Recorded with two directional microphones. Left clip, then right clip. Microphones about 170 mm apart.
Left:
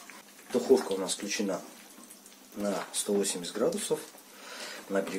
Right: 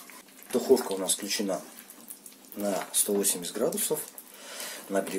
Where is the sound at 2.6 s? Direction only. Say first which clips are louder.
Right 3 dB; 25° right (ahead or behind).